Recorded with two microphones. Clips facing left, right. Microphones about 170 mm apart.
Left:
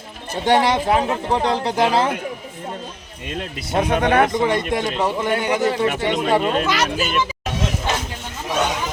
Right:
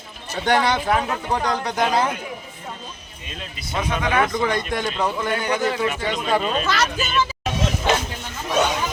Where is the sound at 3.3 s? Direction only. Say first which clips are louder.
Left 7 dB; 60° left (ahead or behind).